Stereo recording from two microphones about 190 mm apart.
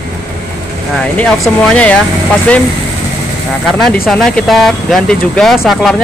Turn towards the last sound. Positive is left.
turn(degrees=0)  # may be behind; listen again after turning